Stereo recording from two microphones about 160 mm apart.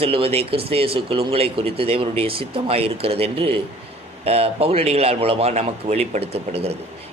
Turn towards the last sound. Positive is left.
turn(degrees=-40)  # may be behind; listen again after turning